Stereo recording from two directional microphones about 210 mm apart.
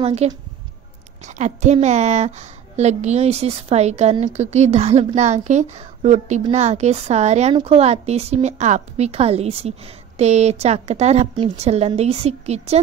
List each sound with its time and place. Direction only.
0.0 s a woman's voice: 30° right (ahead or behind)